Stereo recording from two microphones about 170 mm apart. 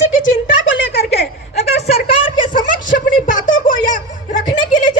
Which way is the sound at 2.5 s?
50° left (ahead or behind).